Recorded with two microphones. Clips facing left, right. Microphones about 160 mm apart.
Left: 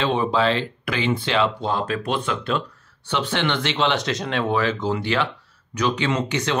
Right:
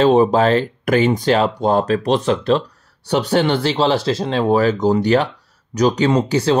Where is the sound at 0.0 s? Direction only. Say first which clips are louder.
Right 8 dB; 40° right (ahead or behind).